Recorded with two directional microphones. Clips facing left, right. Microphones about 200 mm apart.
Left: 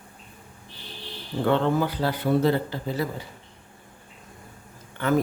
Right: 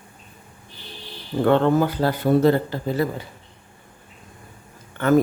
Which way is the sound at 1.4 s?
50° right (ahead or behind).